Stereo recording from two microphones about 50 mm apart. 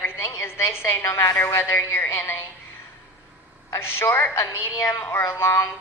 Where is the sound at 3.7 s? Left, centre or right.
Left.